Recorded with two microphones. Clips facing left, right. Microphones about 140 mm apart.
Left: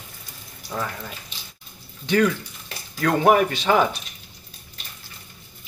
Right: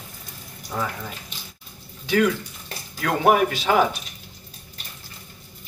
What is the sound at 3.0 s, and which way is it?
Speech, 5° right (ahead or behind).